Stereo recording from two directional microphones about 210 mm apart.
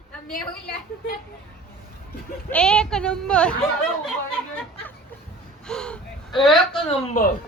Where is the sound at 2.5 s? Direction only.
5° left (ahead or behind).